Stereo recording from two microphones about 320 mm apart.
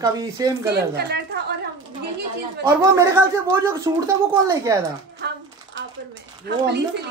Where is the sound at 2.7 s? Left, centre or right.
Centre.